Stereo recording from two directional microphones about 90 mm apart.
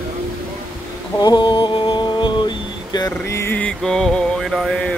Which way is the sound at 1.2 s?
60° left (ahead or behind).